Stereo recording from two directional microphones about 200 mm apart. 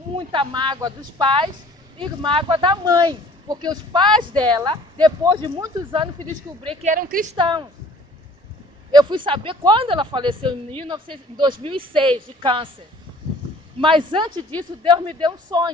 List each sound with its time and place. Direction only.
0.2 s speech: 25° right (ahead or behind)
6.3 s speech: 40° right (ahead or behind)
7.3 s speech: 25° right (ahead or behind)
8.9 s speech: 20° right (ahead or behind)
13.8 s speech: 25° right (ahead or behind)